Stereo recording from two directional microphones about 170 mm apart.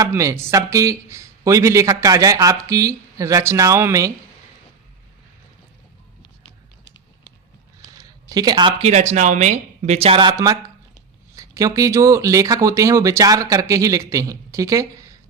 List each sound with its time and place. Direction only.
0.0 s a man's voice: 15° right (ahead or behind)
8.3 s speech: 25° right (ahead or behind)
8.8 s speech: 40° right (ahead or behind); by 15.2 s 20° right (ahead or behind)